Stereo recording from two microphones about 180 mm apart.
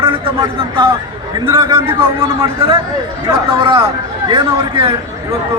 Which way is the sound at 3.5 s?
30° right (ahead or behind).